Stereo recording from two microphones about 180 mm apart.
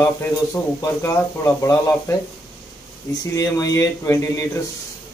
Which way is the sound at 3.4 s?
20° left (ahead or behind).